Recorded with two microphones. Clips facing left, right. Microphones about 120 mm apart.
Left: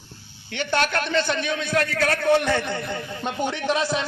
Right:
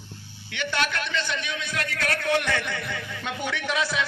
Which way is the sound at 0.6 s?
40° left (ahead or behind).